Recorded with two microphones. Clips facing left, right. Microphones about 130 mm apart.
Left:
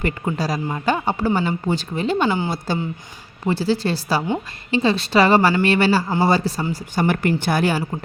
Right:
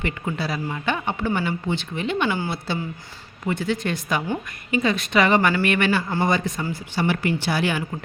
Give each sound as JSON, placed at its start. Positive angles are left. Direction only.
{"t": 0.0, "sound": "speech", "side_deg": 40}
{"t": 3.4, "sound": "speech", "side_deg": 30}
{"t": 6.7, "sound": "speech", "side_deg": 45}